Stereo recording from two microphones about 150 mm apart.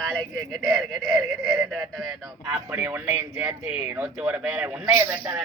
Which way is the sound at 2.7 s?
10° right (ahead or behind).